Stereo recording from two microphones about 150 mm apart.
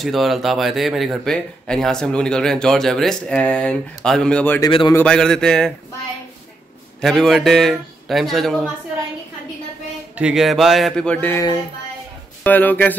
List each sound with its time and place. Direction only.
0.0 s speech: centre (ahead or behind)
4.6 s a man's voice: 30° left (ahead or behind)
4.9 s speech: 5° left (ahead or behind)
7.0 s speech: 5° left (ahead or behind)
10.1 s speech: 5° right (ahead or behind)
12.4 s speech: 10° left (ahead or behind)